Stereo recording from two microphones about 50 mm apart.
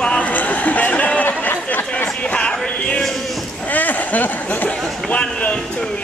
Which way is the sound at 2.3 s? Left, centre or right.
Centre.